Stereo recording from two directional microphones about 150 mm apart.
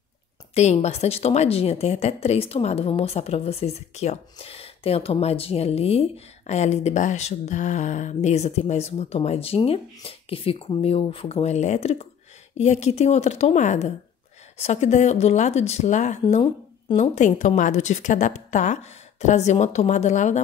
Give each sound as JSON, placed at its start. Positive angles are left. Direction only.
{"t": 0.6, "sound": "a woman's voice", "side_deg": 45}